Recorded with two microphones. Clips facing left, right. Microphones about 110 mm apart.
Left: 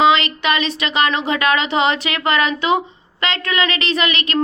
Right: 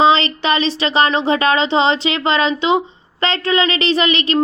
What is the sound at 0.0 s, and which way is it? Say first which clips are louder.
Speech: right 1 dB; 30° right (ahead or behind).